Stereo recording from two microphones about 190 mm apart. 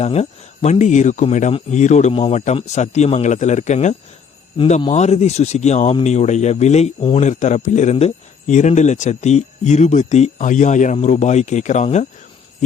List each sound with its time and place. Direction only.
0.0 s speech: 35° left (ahead or behind)
4.5 s speech: 25° left (ahead or behind)